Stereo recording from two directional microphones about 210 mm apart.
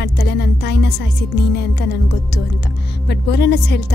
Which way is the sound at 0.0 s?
50° left (ahead or behind).